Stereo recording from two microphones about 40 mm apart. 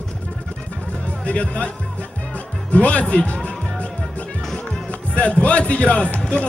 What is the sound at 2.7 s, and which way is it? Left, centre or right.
Speech, left.